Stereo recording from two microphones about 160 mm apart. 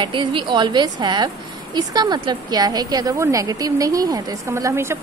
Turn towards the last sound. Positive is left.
turn(degrees=-15)  # may be behind; listen again after turning